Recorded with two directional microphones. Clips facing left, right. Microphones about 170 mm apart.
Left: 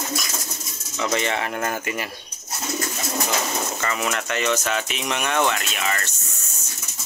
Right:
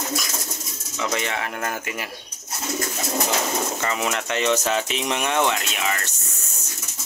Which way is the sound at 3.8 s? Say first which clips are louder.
Right 1 dB; 15° right (ahead or behind).